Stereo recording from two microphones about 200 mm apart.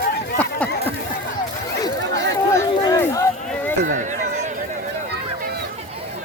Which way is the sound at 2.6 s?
15° left (ahead or behind).